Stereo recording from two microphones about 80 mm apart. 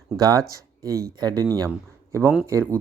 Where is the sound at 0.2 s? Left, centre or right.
Right.